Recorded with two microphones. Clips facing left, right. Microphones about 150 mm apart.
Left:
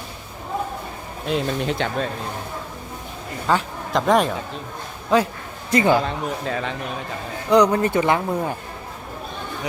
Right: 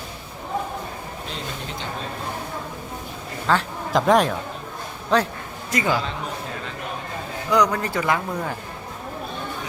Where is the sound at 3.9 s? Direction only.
Centre (ahead or behind).